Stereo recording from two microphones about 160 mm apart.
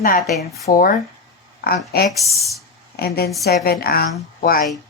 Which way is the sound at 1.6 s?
75° left (ahead or behind).